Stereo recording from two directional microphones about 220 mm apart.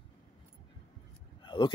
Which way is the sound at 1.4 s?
20° left (ahead or behind).